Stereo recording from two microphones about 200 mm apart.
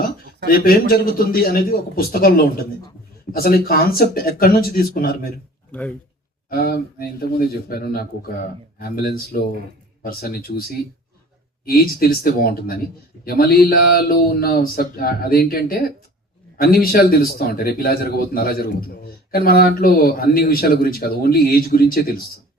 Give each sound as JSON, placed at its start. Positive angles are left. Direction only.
{"t": 0.4, "sound": "speech", "side_deg": 45}
{"t": 5.7, "sound": "speech", "side_deg": 5}
{"t": 6.5, "sound": "speech", "side_deg": 50}